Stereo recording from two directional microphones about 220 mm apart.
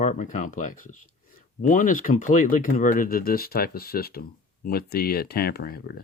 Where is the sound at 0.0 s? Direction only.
35° left (ahead or behind).